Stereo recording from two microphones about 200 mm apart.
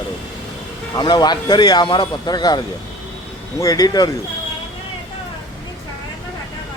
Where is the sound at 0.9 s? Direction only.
20° left (ahead or behind).